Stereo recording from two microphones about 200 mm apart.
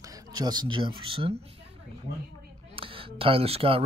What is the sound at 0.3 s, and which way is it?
Speech, 20° right (ahead or behind).